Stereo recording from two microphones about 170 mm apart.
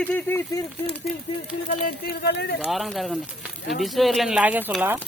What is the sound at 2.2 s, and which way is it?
Speech, 80° left.